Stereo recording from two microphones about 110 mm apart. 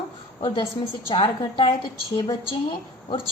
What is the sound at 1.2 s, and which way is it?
A woman's voice, 45° left (ahead or behind).